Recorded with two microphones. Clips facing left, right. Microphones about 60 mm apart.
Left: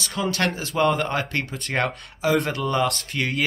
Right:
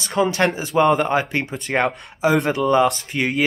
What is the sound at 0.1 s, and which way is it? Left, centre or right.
Speech, right.